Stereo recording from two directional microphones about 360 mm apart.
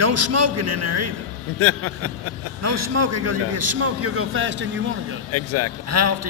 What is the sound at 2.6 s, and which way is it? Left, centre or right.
A man's voice, right.